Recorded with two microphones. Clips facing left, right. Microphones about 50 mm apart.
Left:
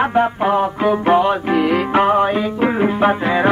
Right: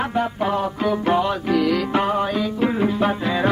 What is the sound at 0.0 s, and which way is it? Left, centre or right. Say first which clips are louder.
Music: left 6 dB; left.